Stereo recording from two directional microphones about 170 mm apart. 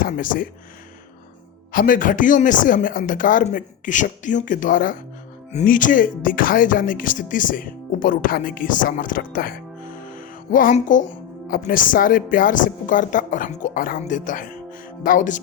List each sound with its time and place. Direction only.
0.0 s speech: 55° left (ahead or behind)
1.7 s music: 55° left (ahead or behind)
10.0 s speech: 55° left (ahead or behind)
14.0 s music: 50° left (ahead or behind)